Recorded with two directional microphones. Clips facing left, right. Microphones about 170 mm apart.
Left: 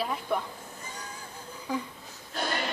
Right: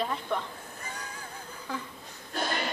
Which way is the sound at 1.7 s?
10° left (ahead or behind).